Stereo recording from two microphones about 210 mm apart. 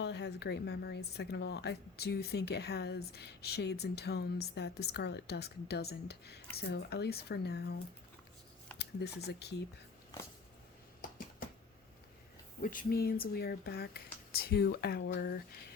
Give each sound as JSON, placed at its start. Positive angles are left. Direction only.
{"t": 0.0, "sound": "a woman's voice", "side_deg": 55}
{"t": 8.8, "sound": "speech", "side_deg": 50}
{"t": 12.6, "sound": "a woman's voice", "side_deg": 45}